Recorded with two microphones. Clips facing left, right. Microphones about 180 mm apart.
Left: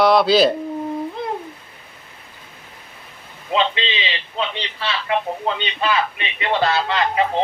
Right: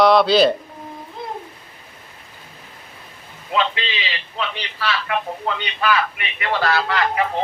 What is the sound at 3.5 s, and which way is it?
A man's voice, 20° left (ahead or behind).